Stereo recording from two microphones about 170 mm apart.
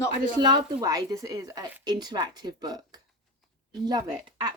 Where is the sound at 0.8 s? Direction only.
20° right (ahead or behind).